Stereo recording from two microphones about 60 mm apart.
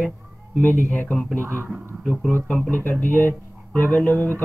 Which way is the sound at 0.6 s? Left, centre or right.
Left.